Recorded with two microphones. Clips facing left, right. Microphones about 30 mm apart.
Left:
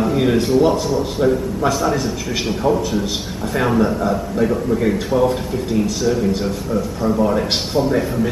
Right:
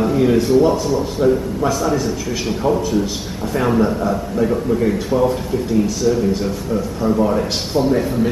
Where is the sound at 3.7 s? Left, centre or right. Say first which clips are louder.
Right 1 dB; centre.